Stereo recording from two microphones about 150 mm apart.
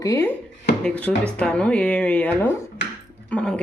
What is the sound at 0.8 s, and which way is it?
Speech, 10° left (ahead or behind).